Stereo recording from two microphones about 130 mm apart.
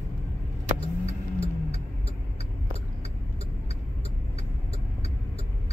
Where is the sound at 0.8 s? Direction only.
50° left (ahead or behind).